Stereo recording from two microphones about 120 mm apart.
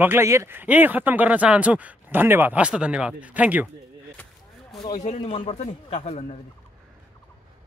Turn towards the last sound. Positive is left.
turn(degrees=65)  # may be behind; listen again after turning